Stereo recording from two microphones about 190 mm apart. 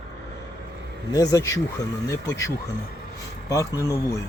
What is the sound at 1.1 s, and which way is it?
Speech, 20° left (ahead or behind).